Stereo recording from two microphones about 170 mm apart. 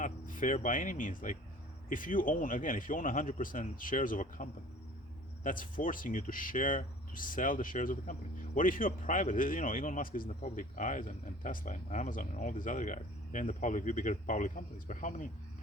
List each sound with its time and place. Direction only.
0.0 s a man's voice: 50° left (ahead or behind)